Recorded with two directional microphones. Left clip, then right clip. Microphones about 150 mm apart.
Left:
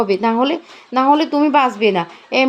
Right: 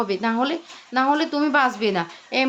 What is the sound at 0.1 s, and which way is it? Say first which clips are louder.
A woman's voice: left 7 dB; 20° left (ahead or behind).